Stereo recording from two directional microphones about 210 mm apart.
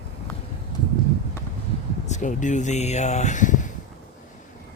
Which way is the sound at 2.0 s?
35° left (ahead or behind).